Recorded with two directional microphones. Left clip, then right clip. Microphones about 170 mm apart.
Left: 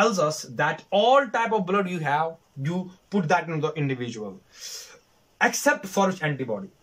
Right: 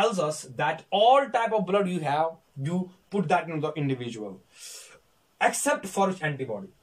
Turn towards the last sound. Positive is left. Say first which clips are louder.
# left 2 dB
turn(degrees=-10)  # may be behind; listen again after turning